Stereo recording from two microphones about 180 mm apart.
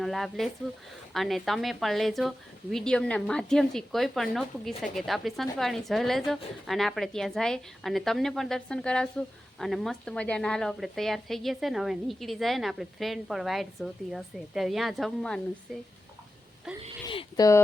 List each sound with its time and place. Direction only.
0.0 s a woman's voice: centre (ahead or behind)
17.1 s speech: 25° left (ahead or behind)